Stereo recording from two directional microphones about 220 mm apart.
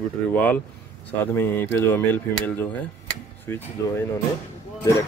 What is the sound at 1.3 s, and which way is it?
Speech, 10° left (ahead or behind).